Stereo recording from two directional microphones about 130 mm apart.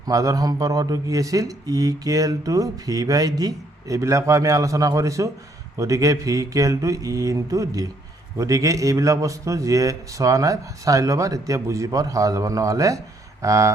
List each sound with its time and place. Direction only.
0.0 s speech: 25° right (ahead or behind)